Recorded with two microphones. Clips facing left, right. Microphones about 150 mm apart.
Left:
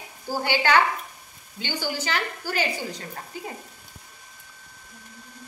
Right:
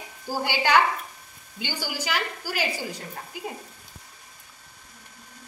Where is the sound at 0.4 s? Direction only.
10° right (ahead or behind).